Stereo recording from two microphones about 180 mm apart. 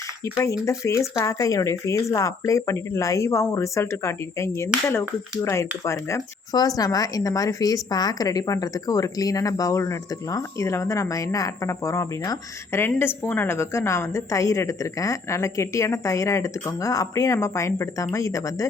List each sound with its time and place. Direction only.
0.3 s speech: 15° left (ahead or behind)